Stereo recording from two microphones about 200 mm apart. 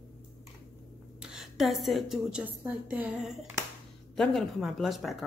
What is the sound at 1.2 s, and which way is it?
A woman's voice, 5° right (ahead or behind).